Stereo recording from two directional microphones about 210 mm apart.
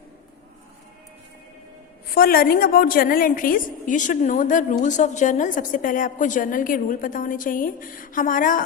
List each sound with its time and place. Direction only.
2.1 s a woman's voice: 45° left (ahead or behind)